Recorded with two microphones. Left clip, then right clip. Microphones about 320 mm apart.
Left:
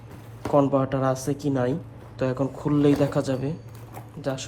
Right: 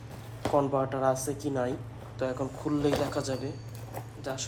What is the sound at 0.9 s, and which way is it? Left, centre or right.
A man's voice, left.